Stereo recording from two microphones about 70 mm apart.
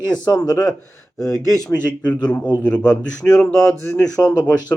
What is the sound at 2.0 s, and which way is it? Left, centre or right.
A man's voice, centre.